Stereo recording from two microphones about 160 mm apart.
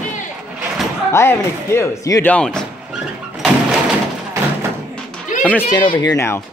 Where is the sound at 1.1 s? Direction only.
15° left (ahead or behind).